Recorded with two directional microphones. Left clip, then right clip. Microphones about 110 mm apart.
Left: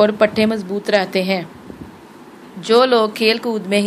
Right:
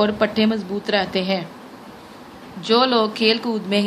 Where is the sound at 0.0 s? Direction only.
40° left (ahead or behind).